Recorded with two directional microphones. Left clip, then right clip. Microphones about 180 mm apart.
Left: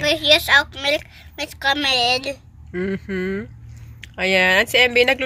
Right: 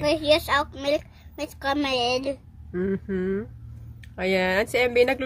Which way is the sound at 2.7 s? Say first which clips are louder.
Left 3 dB; 15° left (ahead or behind).